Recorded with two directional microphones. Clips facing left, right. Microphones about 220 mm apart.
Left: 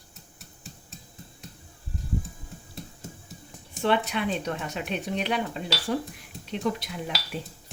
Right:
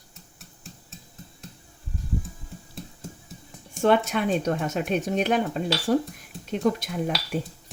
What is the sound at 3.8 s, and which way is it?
Speech, 45° right (ahead or behind).